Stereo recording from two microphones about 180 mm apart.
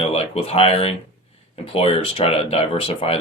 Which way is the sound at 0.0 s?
35° left (ahead or behind).